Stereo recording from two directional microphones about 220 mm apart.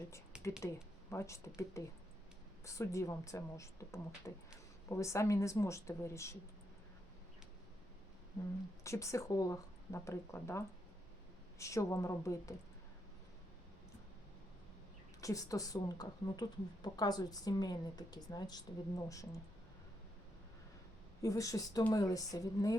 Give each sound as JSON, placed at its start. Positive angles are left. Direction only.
{"t": 0.3, "sound": "a sound", "side_deg": -5}
{"t": 1.1, "sound": "speech", "side_deg": 15}
{"t": 8.8, "sound": "speech", "side_deg": 15}
{"t": 11.6, "sound": "speech", "side_deg": 15}
{"t": 15.2, "sound": "speech", "side_deg": 15}
{"t": 21.2, "sound": "speech", "side_deg": 15}